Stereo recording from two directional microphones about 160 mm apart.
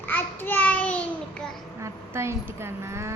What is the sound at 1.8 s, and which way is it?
A woman's voice, 15° right (ahead or behind).